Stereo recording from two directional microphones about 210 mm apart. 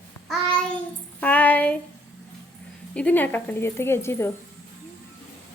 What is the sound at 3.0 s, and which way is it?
Speech, 5° left (ahead or behind).